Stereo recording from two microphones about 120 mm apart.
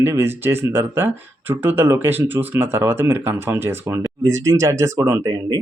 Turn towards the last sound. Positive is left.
turn(degrees=-25)  # may be behind; listen again after turning